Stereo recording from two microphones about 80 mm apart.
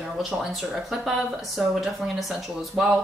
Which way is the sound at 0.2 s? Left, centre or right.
Centre.